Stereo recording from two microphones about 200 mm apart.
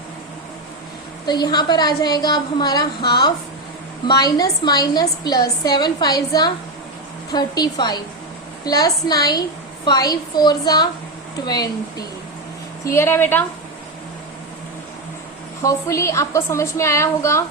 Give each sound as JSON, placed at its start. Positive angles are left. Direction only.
{"t": 1.3, "sound": "a woman's voice", "side_deg": 20}
{"t": 15.6, "sound": "a woman's voice", "side_deg": 15}